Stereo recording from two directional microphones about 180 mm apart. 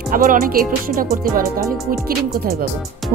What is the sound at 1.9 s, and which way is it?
Music, 55° right (ahead or behind).